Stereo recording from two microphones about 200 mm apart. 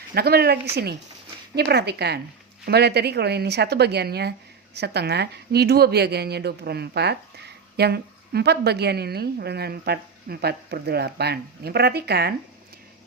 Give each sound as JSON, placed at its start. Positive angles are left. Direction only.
{"t": 0.1, "sound": "a woman's voice", "side_deg": -50}